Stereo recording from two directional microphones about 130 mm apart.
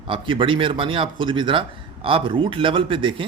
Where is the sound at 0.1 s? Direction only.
40° right (ahead or behind).